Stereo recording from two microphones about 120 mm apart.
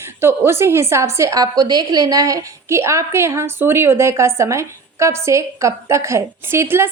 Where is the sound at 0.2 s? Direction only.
20° right (ahead or behind).